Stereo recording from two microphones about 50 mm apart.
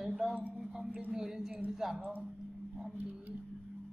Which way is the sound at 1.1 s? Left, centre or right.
Centre.